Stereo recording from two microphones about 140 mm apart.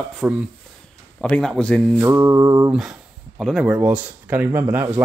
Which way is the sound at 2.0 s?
20° right (ahead or behind).